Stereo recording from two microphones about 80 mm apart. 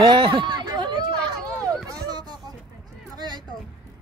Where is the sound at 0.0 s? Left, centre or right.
Right.